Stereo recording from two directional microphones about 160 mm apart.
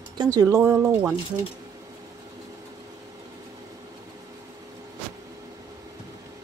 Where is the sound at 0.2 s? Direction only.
25° right (ahead or behind).